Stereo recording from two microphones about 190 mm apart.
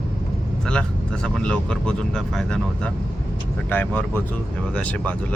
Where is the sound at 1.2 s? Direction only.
5° left (ahead or behind).